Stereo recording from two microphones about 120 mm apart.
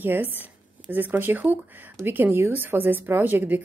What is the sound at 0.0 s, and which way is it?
Speech, 15° right (ahead or behind).